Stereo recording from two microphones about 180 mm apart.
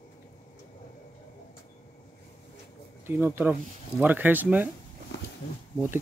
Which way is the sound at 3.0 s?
15° right (ahead or behind).